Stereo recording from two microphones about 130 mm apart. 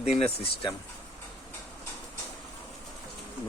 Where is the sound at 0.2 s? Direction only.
45° left (ahead or behind).